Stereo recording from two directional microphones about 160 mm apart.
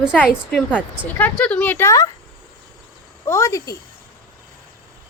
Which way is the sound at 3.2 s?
15° left (ahead or behind).